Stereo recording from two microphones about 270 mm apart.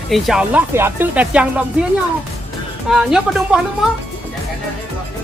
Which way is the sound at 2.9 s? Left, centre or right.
Centre.